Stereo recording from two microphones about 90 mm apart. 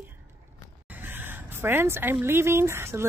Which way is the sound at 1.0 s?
25° right (ahead or behind).